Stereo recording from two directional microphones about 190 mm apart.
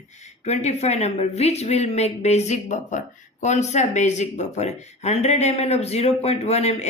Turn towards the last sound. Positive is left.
turn(degrees=35)  # may be behind; listen again after turning